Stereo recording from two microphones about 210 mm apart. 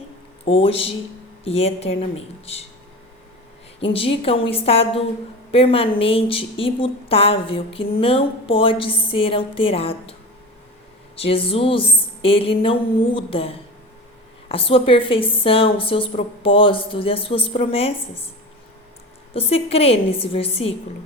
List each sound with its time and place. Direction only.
0.4 s a woman's voice: 25° left (ahead or behind)
3.8 s a woman's voice: 25° left (ahead or behind)
11.2 s a woman's voice: 25° left (ahead or behind)
19.3 s a woman's voice: 30° left (ahead or behind)